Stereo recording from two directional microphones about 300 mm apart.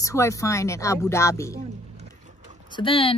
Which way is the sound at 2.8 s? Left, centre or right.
Centre.